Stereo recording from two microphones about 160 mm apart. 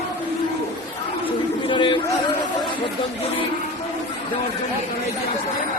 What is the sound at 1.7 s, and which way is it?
Chatter, 30° left (ahead or behind).